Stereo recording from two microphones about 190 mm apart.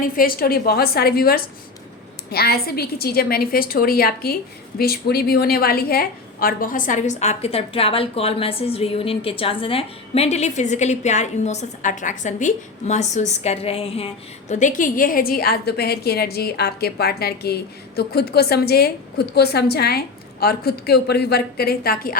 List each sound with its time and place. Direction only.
0.0 s a woman's voice: 50° left (ahead or behind); by 14.1 s 30° left (ahead or behind)
14.5 s a woman's voice: 40° left (ahead or behind)